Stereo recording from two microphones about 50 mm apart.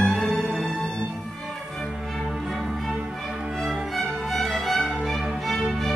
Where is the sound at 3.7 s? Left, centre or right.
Centre.